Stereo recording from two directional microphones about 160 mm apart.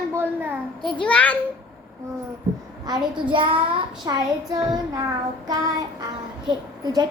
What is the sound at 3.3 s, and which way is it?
Child singing, 30° right (ahead or behind).